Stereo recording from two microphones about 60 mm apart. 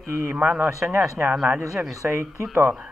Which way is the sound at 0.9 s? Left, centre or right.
Right.